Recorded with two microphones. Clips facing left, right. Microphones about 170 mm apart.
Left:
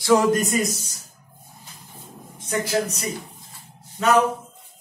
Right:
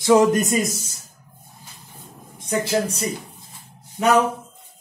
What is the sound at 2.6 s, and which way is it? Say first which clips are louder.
Speech: right 1 dB; 30° right (ahead or behind).